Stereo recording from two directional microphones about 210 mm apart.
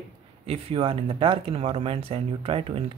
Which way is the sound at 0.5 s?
30° right (ahead or behind).